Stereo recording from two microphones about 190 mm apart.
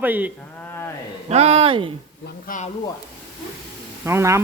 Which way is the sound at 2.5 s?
40° left (ahead or behind).